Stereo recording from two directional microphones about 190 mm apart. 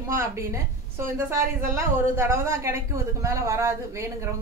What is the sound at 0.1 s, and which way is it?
A woman's voice, 15° right (ahead or behind).